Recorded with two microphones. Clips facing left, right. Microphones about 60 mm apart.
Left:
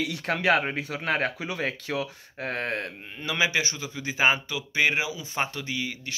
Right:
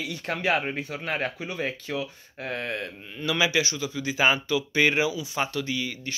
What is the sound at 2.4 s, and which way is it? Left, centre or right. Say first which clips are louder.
Speech: left 1 dB; left.